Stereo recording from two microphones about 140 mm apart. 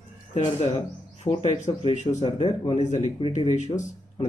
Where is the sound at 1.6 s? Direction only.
55° left (ahead or behind).